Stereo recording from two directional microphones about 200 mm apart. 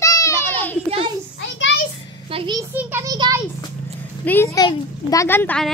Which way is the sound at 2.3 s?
25° right (ahead or behind).